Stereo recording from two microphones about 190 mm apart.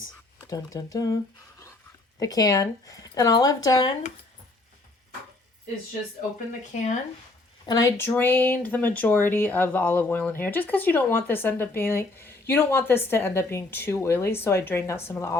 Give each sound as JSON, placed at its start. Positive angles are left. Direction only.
{"t": 0.5, "sound": "speech", "side_deg": 20}
{"t": 2.1, "sound": "speech", "side_deg": 20}
{"t": 6.5, "sound": "speech", "side_deg": 40}
{"t": 7.7, "sound": "speech", "side_deg": 15}